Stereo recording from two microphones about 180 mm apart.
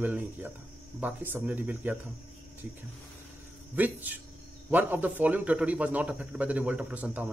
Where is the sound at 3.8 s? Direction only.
10° right (ahead or behind).